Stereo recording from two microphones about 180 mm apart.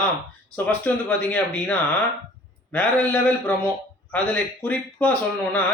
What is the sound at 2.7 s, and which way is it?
A man's voice, 5° left (ahead or behind).